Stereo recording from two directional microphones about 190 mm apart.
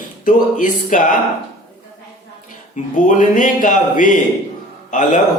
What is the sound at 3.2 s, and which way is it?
Speech, 45° left (ahead or behind).